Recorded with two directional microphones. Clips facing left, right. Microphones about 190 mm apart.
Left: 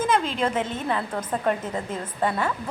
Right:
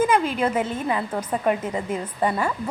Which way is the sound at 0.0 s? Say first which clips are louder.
Right 3 dB; 10° right (ahead or behind).